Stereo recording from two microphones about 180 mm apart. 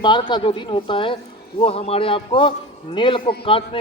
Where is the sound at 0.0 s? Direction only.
25° left (ahead or behind).